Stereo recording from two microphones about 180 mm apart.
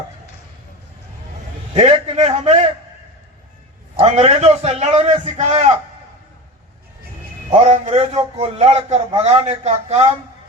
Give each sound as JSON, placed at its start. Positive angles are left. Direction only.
{"t": 1.7, "sound": "a man's voice", "side_deg": -35}
{"t": 3.9, "sound": "a man's voice", "side_deg": -30}
{"t": 7.5, "sound": "a man's voice", "side_deg": -40}